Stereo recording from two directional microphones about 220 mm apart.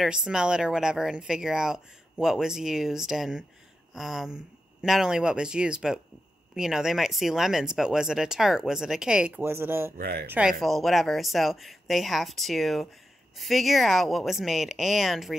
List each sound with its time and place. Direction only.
0.0 s speech: 5° right (ahead or behind)
9.9 s speech: 45° right (ahead or behind)
10.2 s speech: 5° right (ahead or behind)